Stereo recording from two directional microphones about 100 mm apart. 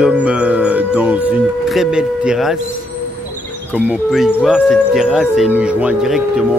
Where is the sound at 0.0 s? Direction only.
10° right (ahead or behind).